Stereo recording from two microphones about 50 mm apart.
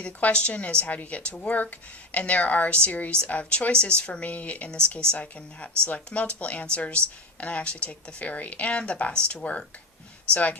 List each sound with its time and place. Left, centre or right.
0.0 s speech: left